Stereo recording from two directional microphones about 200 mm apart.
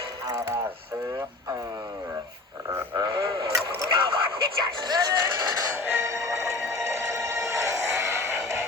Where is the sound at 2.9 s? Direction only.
15° right (ahead or behind).